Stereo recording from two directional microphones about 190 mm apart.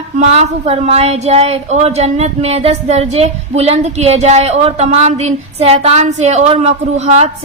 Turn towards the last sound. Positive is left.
turn(degrees=-35)  # may be behind; listen again after turning